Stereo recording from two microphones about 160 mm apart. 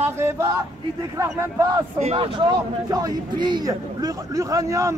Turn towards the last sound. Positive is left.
turn(degrees=-20)  # may be behind; listen again after turning